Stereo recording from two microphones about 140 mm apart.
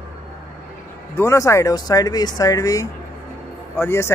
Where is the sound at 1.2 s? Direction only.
20° left (ahead or behind).